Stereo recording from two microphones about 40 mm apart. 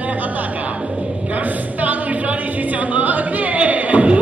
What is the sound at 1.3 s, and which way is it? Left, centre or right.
A capella, right.